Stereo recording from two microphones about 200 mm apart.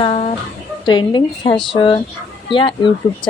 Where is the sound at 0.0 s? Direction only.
25° left (ahead or behind).